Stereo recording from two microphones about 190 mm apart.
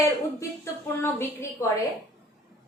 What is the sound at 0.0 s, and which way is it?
A woman's voice, 15° left (ahead or behind).